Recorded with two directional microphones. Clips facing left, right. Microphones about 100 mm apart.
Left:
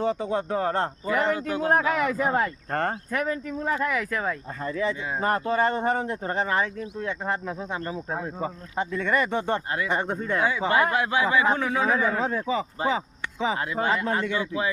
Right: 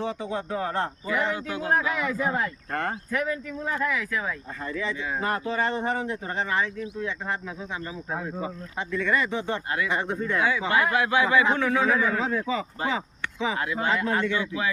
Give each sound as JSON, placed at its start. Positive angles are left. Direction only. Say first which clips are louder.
{"t": 0.0, "sound": "a man's voice", "louder": "left 4 dB", "side_deg": 40}
{"t": 8.1, "sound": "speech", "louder": "right 2 dB", "side_deg": 30}
{"t": 8.8, "sound": "speech", "louder": "left 1 dB", "side_deg": 40}
{"t": 9.7, "sound": "a man's voice", "louder": "left 1 dB", "side_deg": 35}